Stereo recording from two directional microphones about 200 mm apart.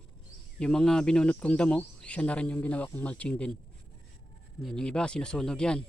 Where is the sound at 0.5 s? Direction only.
5° left (ahead or behind).